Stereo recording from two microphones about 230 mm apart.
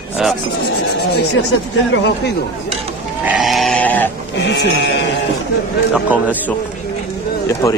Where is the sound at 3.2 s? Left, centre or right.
Centre.